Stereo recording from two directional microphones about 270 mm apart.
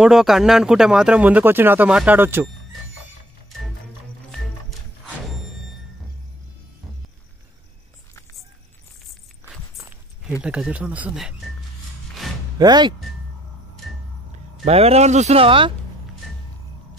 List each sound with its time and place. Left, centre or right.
0.0 s speech: centre
9.8 s a sound: centre
10.4 s speech: centre
12.2 s a sound: centre
12.5 s speech: centre
14.6 s speech: right